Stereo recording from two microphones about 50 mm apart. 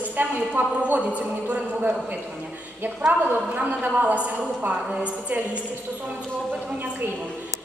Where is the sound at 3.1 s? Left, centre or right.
Right.